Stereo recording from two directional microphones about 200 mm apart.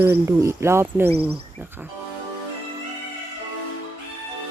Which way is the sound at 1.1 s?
30° right (ahead or behind).